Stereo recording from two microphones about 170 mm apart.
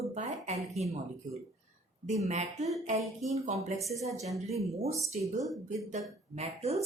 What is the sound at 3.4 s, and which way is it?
Speech, 50° right (ahead or behind).